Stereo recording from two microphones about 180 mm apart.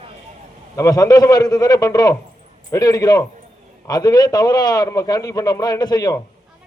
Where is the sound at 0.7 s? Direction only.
20° left (ahead or behind).